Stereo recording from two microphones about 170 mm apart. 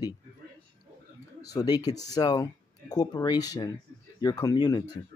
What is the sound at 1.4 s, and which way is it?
Speech, 20° left (ahead or behind).